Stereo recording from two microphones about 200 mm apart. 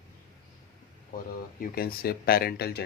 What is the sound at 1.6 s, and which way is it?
Speech, 50° left (ahead or behind).